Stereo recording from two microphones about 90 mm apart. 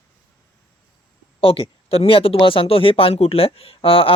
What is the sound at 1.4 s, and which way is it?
Speech, 90° left.